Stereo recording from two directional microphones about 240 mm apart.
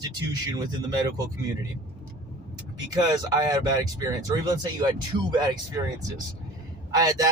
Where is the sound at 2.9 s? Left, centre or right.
Centre.